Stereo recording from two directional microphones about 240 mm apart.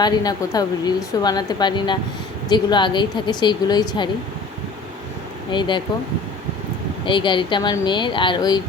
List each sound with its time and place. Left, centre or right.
0.0 s a woman's voice: centre
5.5 s a woman's voice: centre
7.0 s a woman's voice: centre